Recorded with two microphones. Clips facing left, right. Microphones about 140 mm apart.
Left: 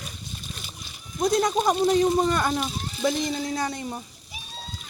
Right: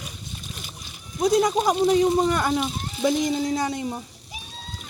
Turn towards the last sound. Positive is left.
turn(degrees=-15)  # may be behind; listen again after turning